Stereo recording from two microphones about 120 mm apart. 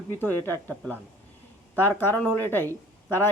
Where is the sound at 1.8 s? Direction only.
15° left (ahead or behind).